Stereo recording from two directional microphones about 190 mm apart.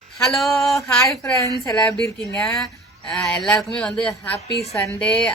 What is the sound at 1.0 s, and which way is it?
Speech, 15° left (ahead or behind).